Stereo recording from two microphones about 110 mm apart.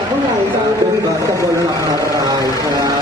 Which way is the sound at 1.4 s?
30° right (ahead or behind).